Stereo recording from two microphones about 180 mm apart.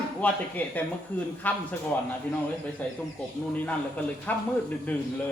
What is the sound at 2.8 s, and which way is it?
Speech, 10° left (ahead or behind).